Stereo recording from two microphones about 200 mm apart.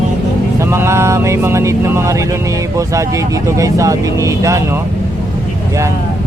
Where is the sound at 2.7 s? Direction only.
15° right (ahead or behind).